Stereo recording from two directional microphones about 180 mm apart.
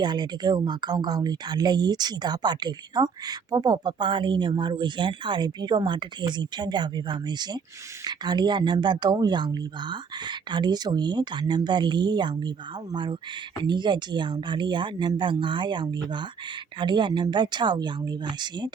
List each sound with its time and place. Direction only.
0.0 s speech: 25° right (ahead or behind)